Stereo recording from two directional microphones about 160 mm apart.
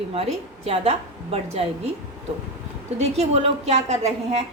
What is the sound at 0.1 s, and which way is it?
Speech, 40° right (ahead or behind).